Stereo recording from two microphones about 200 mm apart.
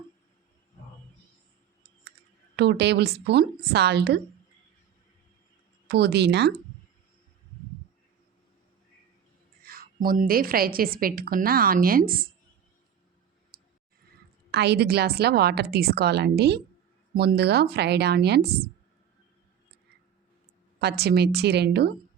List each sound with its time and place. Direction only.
2.6 s a woman's voice: 55° right (ahead or behind)
5.9 s a woman's voice: 55° right (ahead or behind)
9.6 s a woman's voice: 45° right (ahead or behind)
13.5 s clicking: 50° right (ahead or behind)
14.5 s a woman's voice: 55° right (ahead or behind)
20.8 s a woman's voice: 55° right (ahead or behind)